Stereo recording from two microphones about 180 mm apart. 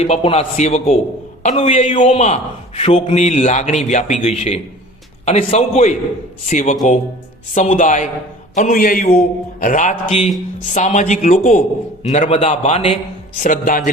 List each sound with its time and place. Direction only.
0.0 s a man's voice: 35° left (ahead or behind); by 9.0 s 50° left (ahead or behind)
9.0 s a man's voice: 40° left (ahead or behind)